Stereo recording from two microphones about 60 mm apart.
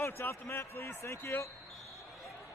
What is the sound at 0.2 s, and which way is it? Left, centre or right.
Speech, left.